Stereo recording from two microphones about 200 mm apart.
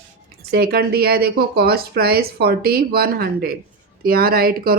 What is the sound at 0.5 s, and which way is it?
Speech, 50° right (ahead or behind).